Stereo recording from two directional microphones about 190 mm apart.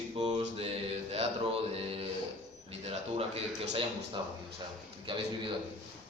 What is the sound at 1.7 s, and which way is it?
Speech, 30° right (ahead or behind).